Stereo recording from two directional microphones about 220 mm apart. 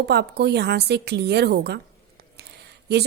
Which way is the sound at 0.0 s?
50° right (ahead or behind).